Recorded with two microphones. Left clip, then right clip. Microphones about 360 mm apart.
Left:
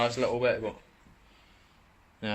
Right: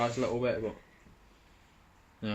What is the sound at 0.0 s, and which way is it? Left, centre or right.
Speech, left.